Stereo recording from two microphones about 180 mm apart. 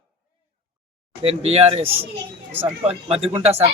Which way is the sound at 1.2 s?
35° right (ahead or behind).